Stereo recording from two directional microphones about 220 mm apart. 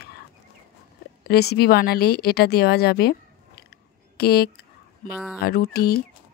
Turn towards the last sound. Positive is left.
turn(degrees=45)  # may be behind; listen again after turning